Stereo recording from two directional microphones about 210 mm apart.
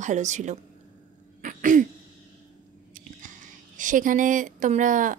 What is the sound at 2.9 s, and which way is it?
A woman's voice, 40° right (ahead or behind).